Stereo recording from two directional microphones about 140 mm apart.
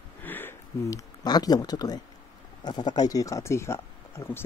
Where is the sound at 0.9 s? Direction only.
25° left (ahead or behind).